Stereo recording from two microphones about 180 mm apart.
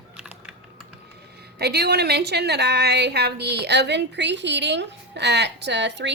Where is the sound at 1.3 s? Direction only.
65° right (ahead or behind).